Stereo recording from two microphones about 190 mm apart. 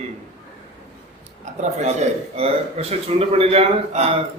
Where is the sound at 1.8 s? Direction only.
35° right (ahead or behind).